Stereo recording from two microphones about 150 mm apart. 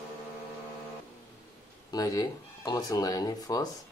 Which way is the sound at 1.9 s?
25° left (ahead or behind).